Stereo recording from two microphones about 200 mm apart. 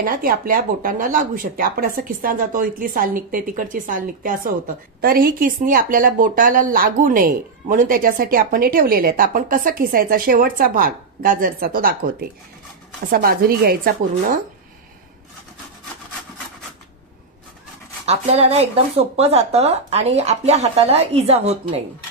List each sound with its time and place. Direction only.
0.0 s speech: 45° right (ahead or behind)
18.0 s speech: 30° right (ahead or behind)